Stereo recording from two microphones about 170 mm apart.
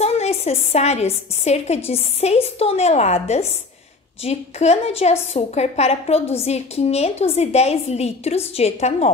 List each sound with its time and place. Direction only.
0.0 s a woman's voice: 40° left (ahead or behind)